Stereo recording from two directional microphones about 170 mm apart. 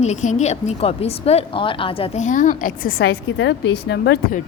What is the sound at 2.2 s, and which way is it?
A woman's voice, 50° left (ahead or behind).